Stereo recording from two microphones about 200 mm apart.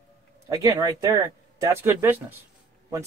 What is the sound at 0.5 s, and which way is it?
Speech, 20° right (ahead or behind).